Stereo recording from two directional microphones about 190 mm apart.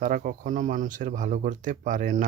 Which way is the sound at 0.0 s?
45° right (ahead or behind).